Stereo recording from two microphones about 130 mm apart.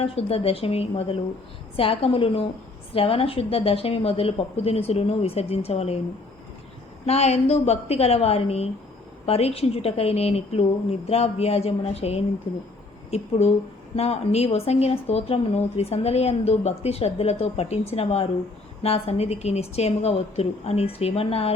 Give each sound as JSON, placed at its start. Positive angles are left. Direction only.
{"t": 0.0, "sound": "a woman's voice", "side_deg": 50}
{"t": 7.0, "sound": "a woman's voice", "side_deg": 55}